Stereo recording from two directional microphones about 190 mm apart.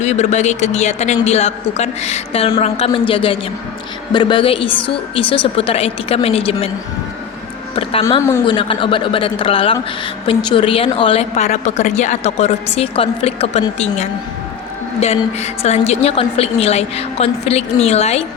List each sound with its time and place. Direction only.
0.0 s a woman's voice: 35° left (ahead or behind)
8.4 s a woman's voice: 25° left (ahead or behind)